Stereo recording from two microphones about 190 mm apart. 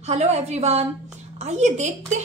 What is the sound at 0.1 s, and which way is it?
A woman's voice, 35° right (ahead or behind).